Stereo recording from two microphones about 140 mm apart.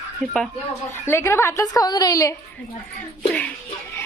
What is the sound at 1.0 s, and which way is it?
A woman's voice, 20° left (ahead or behind).